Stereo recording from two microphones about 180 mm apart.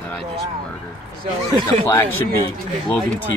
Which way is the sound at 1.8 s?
15° left (ahead or behind).